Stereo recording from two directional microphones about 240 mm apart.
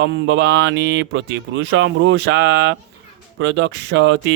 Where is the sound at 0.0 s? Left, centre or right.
Right.